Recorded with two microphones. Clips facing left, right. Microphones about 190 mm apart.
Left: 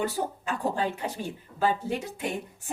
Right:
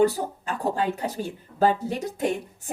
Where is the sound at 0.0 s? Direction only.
40° right (ahead or behind).